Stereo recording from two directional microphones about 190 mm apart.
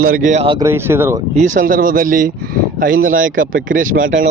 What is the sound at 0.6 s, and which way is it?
Speech, 10° right (ahead or behind).